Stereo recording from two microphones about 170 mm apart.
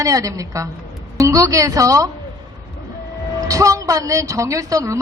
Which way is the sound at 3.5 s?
20° right (ahead or behind).